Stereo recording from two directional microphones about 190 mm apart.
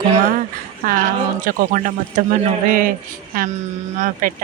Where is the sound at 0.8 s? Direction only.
50° right (ahead or behind).